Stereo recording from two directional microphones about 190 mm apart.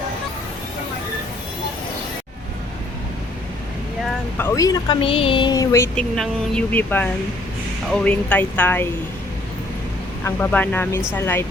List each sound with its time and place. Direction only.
4.4 s speech: 15° left (ahead or behind)
6.0 s speech: 5° left (ahead or behind)
10.2 s speech: 10° left (ahead or behind)